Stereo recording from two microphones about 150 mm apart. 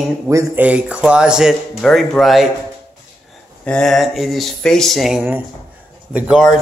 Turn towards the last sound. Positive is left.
turn(degrees=-5)  # may be behind; listen again after turning